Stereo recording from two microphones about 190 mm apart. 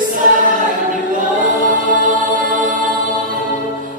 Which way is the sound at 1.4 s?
45° right (ahead or behind).